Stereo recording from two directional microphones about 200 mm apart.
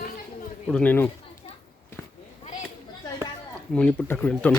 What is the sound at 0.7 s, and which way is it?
Speech, 5° left (ahead or behind).